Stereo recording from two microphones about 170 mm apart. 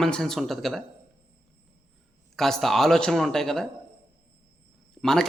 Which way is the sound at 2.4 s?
Centre (ahead or behind).